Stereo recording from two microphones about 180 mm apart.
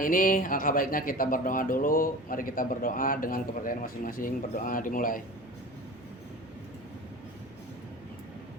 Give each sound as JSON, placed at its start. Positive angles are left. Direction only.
{"t": 0.0, "sound": "speech", "side_deg": 50}